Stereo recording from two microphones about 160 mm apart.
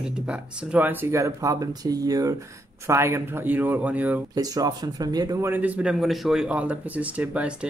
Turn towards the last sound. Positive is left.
turn(degrees=-10)  # may be behind; listen again after turning